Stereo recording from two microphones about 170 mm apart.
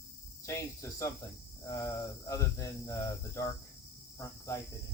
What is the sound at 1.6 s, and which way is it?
Speech, 20° left (ahead or behind).